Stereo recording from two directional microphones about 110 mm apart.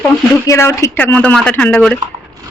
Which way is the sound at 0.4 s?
30° left (ahead or behind).